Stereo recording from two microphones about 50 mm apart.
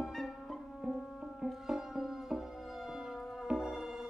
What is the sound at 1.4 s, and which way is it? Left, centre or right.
Music, centre.